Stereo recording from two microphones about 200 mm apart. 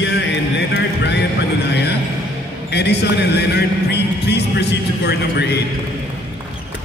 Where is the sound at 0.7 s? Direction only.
60° left (ahead or behind).